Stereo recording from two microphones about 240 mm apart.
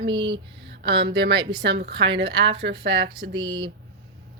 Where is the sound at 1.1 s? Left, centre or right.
Right.